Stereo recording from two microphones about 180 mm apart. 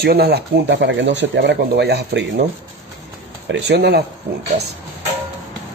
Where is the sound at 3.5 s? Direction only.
70° right (ahead or behind).